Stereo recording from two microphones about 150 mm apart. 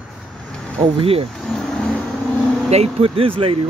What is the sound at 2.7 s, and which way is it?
Speech, 40° right (ahead or behind).